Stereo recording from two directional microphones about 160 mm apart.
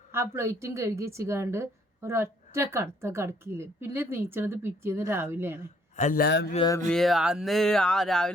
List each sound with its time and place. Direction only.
0.1 s a woman's voice: 15° right (ahead or behind)
6.0 s a man's voice: 55° left (ahead or behind)
6.2 s a sound: 90° left
6.8 s speech: centre (ahead or behind)